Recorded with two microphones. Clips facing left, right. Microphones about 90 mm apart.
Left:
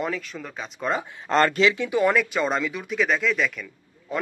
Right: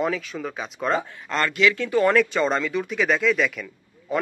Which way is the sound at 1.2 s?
35° left (ahead or behind).